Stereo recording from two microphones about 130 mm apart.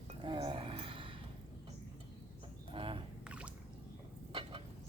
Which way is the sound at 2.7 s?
40° right (ahead or behind).